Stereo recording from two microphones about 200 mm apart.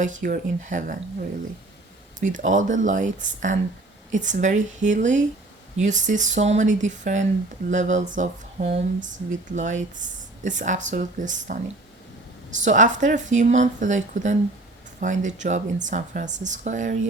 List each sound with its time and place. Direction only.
0.0 s speech: 40° right (ahead or behind)
2.2 s speech: 40° right (ahead or behind)
12.6 s speech: 40° right (ahead or behind)